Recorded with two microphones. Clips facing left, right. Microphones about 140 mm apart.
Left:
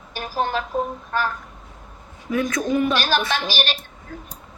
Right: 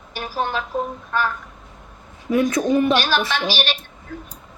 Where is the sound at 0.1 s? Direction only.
40° left (ahead or behind).